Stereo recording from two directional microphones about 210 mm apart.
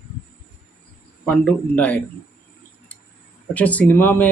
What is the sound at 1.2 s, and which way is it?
Speech, 5° left (ahead or behind).